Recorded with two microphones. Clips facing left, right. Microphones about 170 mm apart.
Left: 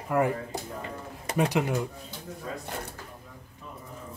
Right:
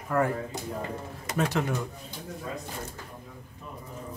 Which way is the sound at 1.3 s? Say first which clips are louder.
Left 2 dB; 15° left (ahead or behind).